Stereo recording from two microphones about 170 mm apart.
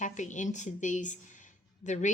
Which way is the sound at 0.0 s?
45° left (ahead or behind).